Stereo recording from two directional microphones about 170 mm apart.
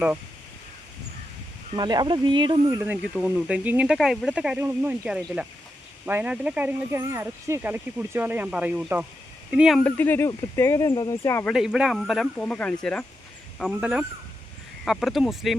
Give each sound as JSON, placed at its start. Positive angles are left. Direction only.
{"t": 1.7, "sound": "speech", "side_deg": -25}
{"t": 9.8, "sound": "speech", "side_deg": 10}
{"t": 11.4, "sound": "speech", "side_deg": -5}
{"t": 14.8, "sound": "speech", "side_deg": 0}